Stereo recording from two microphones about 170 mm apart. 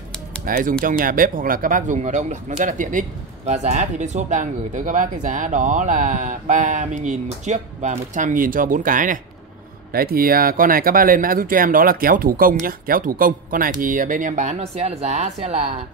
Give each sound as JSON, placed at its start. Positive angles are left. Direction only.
{"t": 0.5, "sound": "speech", "side_deg": -55}